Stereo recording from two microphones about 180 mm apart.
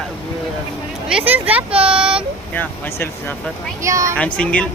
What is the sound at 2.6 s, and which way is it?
Speech, 10° left (ahead or behind).